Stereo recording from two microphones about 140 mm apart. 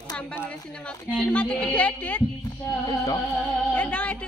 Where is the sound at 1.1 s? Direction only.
10° left (ahead or behind).